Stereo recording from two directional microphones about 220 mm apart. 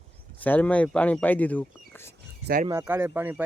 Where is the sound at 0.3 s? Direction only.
5° left (ahead or behind).